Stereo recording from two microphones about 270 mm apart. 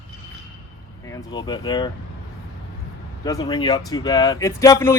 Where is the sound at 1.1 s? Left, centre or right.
Centre.